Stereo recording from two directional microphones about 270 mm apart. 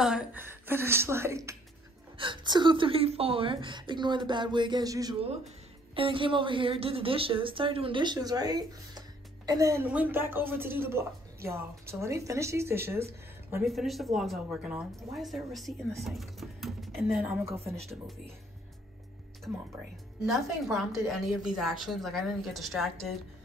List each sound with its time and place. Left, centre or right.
0.0 s a woman's voice: centre
20.2 s speech: centre